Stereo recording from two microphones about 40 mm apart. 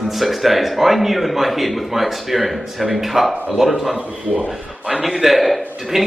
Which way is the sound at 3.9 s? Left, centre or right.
Right.